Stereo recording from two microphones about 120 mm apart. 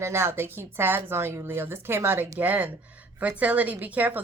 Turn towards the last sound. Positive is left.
turn(degrees=-15)  # may be behind; listen again after turning